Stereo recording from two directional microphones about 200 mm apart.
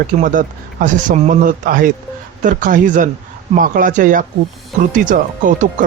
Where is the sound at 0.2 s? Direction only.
40° right (ahead or behind).